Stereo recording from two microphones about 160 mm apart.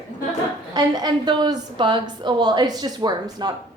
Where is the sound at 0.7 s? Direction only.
25° right (ahead or behind).